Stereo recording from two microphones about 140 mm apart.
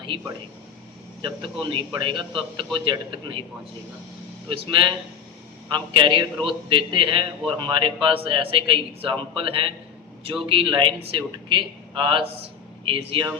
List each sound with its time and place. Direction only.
1.2 s a man's voice: 35° right (ahead or behind)
4.4 s a man's voice: 40° right (ahead or behind)